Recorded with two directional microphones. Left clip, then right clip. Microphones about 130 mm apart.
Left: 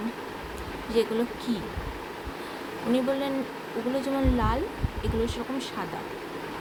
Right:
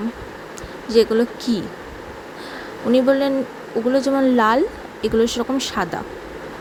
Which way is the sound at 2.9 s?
55° right (ahead or behind).